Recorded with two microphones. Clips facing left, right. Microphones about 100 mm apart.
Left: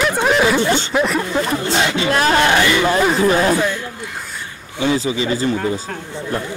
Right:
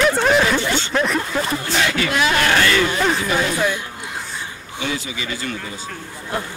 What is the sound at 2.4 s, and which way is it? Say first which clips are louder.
Speech: left 2 dB; 15° left (ahead or behind).